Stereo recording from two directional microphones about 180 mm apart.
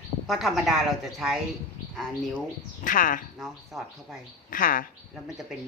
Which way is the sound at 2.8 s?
50° left (ahead or behind).